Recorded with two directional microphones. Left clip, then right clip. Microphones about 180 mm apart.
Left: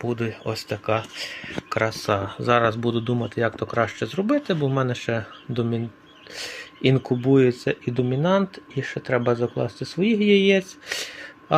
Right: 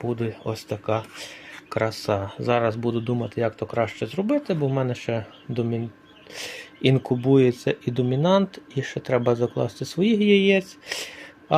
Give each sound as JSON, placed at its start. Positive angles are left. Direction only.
{"t": 0.0, "sound": "speech", "side_deg": -10}
{"t": 6.3, "sound": "speech", "side_deg": -15}
{"t": 9.6, "sound": "speech", "side_deg": -50}
{"t": 10.0, "sound": "speech", "side_deg": -20}